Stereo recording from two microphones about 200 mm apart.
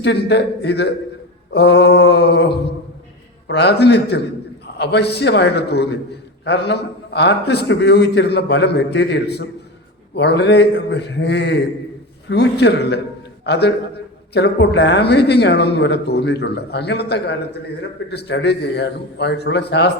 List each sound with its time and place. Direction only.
0.0 s a man's voice: 60° left (ahead or behind)